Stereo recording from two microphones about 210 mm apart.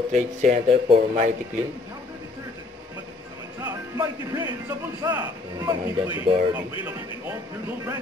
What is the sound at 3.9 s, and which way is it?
Speech, 15° right (ahead or behind).